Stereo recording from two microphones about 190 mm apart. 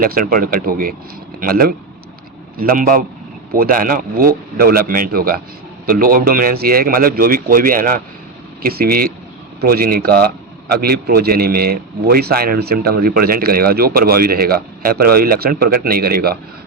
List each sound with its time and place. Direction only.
0.0 s a man's voice: 50° right (ahead or behind)